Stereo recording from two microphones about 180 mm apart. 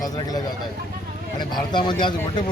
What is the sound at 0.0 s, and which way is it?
Speech, 20° left (ahead or behind).